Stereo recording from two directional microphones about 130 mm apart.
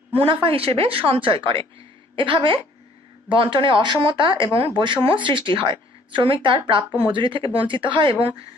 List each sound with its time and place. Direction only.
0.1 s a woman's voice: 45° right (ahead or behind)